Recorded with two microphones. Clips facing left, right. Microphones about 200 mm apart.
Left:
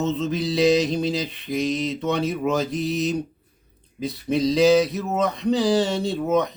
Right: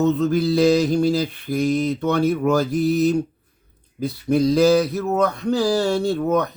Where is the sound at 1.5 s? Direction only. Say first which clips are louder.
Right 2 dB; 30° right (ahead or behind).